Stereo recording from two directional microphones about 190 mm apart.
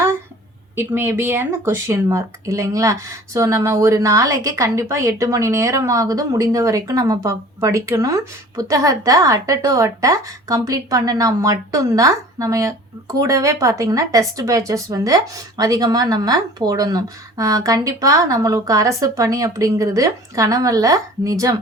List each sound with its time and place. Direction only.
0.8 s speech: 10° right (ahead or behind)